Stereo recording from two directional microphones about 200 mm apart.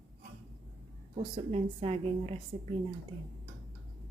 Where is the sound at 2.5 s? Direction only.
30° right (ahead or behind).